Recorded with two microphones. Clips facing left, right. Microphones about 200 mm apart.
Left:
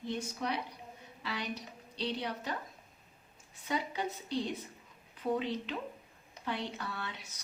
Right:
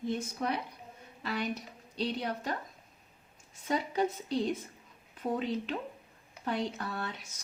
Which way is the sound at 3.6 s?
45° right (ahead or behind).